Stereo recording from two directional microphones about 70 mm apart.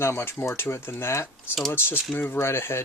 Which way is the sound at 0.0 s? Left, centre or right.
Left.